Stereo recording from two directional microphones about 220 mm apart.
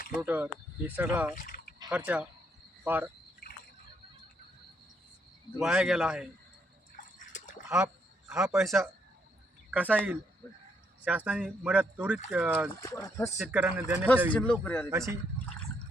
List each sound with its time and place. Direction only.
0.2 s speech: 10° right (ahead or behind)
1.4 s a sound: 40° left (ahead or behind)
1.9 s speech: 5° right (ahead or behind)
5.5 s speech: 5° right (ahead or behind)
8.3 s speech: 5° right (ahead or behind)
12.8 s speech: 15° left (ahead or behind)
13.4 s speech: 5° right (ahead or behind)
14.3 s speech: 5° left (ahead or behind)
14.8 s speech: 15° right (ahead or behind)